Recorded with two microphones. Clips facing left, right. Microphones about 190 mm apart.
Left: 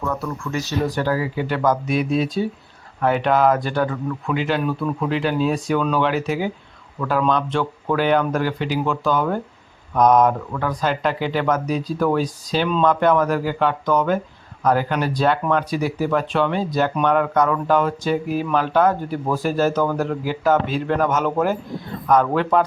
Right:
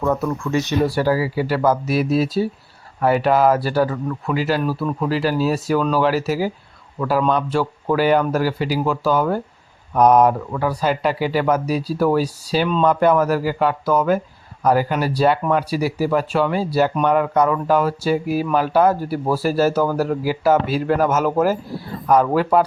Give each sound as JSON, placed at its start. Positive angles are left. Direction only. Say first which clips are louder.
{"t": 0.0, "sound": "speech", "louder": "right 5 dB", "side_deg": -20}
{"t": 0.9, "sound": "speech", "louder": "right 3 dB", "side_deg": -10}